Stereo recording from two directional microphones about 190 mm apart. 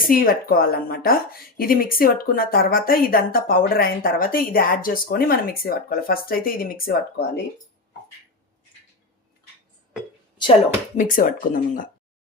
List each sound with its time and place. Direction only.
0.1 s a woman's voice: 50° left (ahead or behind)
10.9 s a woman's voice: 45° left (ahead or behind)